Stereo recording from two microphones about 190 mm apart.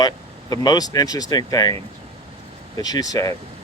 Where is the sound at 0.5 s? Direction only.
20° left (ahead or behind).